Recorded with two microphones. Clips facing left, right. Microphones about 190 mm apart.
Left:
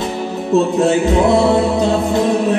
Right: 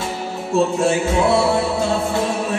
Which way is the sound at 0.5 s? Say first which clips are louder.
Left 4 dB; 20° left (ahead or behind).